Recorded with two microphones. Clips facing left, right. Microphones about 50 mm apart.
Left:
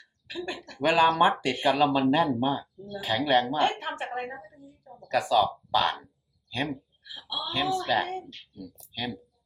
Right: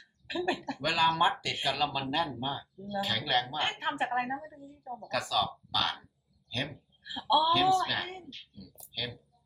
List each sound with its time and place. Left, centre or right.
0.0 s a sound: centre
0.8 s speech: centre
3.6 s a woman's voice: centre
4.9 s speech: right
5.1 s speech: centre
7.0 s speech: centre
7.5 s speech: centre